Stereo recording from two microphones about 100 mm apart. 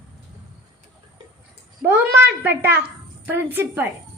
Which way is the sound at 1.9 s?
20° right (ahead or behind).